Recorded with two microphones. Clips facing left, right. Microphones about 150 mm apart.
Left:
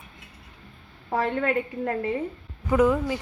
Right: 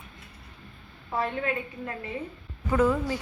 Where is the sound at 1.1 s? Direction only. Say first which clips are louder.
Left 5 dB; 75° left (ahead or behind).